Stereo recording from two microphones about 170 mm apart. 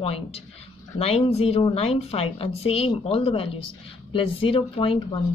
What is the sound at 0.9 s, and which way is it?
Speech, 35° left (ahead or behind).